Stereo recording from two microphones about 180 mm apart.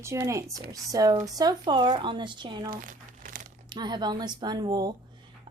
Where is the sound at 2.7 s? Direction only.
50° right (ahead or behind).